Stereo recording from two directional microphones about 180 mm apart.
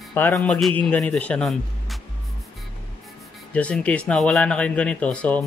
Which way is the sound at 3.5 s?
5° left (ahead or behind).